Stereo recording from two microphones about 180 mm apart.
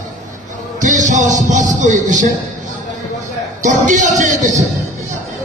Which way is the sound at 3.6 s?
45° right (ahead or behind).